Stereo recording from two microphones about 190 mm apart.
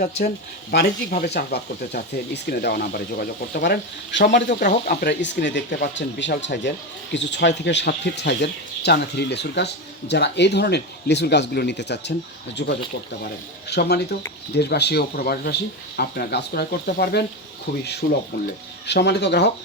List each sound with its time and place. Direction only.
0.7 s speech: 55° left (ahead or behind)